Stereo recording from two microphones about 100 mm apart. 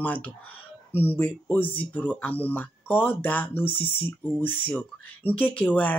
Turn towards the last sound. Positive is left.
turn(degrees=15)  # may be behind; listen again after turning